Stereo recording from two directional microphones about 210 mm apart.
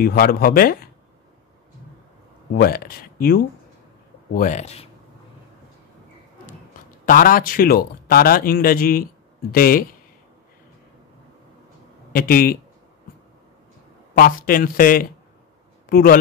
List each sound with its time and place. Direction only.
0.0 s a man's voice: 45° left (ahead or behind)
2.5 s a man's voice: 45° left (ahead or behind)
7.1 s a man's voice: 40° left (ahead or behind)
12.1 s speech: 45° left (ahead or behind)
14.1 s a man's voice: 40° left (ahead or behind)